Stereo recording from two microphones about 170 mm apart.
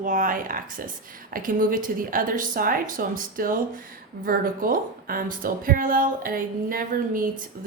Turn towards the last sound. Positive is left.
turn(degrees=-55)  # may be behind; listen again after turning